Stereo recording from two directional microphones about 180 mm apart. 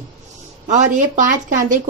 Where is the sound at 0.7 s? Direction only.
45° right (ahead or behind).